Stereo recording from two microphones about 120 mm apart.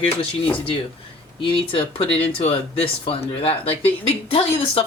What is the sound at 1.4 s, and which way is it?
Speech, 50° left (ahead or behind).